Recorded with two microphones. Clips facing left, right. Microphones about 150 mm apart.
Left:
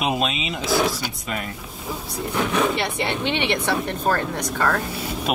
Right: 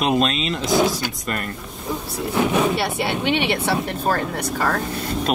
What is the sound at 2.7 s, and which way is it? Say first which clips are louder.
Speech: right 2 dB; 10° right (ahead or behind).